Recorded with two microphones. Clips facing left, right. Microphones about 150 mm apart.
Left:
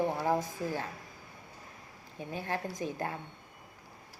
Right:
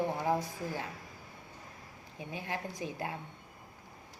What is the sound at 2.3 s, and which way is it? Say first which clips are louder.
Speech: left 3 dB; 15° right (ahead or behind).